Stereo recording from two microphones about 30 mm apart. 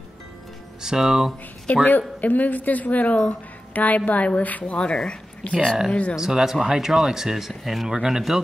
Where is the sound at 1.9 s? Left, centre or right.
Left.